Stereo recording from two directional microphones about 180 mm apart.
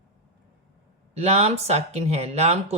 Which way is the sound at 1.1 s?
35° right (ahead or behind).